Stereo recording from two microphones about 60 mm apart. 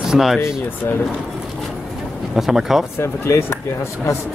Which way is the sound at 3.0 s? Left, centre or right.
Left.